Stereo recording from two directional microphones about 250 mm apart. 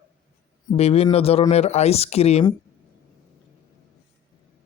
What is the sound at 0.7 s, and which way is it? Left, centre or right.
Speech, left.